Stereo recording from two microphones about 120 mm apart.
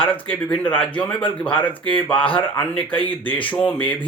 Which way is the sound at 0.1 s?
15° left (ahead or behind).